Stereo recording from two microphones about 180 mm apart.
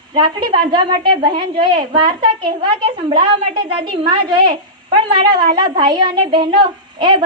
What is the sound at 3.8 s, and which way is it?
Speech, 30° right (ahead or behind).